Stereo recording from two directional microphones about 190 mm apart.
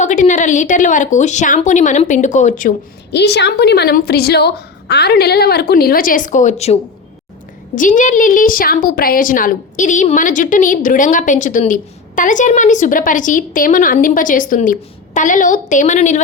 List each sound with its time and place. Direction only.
0.0 s speech: 40° left (ahead or behind)
3.1 s a woman's voice: 60° left (ahead or behind); by 6.7 s 35° left (ahead or behind)
7.8 s a woman's voice: 45° left (ahead or behind)